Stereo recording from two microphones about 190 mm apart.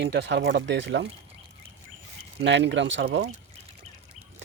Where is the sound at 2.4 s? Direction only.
65° right (ahead or behind).